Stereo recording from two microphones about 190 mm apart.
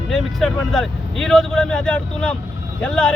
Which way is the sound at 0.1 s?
Centre (ahead or behind).